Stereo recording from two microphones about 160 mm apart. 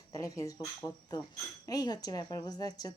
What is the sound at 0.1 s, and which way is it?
Speech, 20° left (ahead or behind).